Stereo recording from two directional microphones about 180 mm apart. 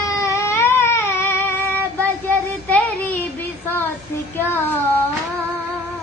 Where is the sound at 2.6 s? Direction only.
10° left (ahead or behind).